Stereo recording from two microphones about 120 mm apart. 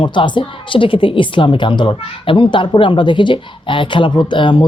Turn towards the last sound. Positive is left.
turn(degrees=45)  # may be behind; listen again after turning